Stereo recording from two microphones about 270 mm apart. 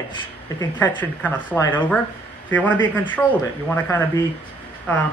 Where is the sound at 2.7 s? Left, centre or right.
Centre.